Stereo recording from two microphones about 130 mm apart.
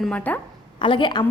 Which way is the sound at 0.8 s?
35° left (ahead or behind).